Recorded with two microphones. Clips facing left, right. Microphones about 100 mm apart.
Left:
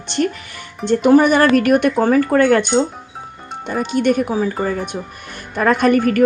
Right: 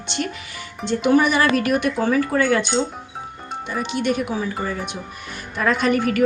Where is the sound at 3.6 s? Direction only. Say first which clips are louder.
Left 6 dB; 45° left (ahead or behind).